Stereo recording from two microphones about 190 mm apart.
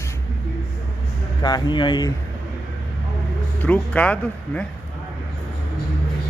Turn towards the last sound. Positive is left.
turn(degrees=5)  # may be behind; listen again after turning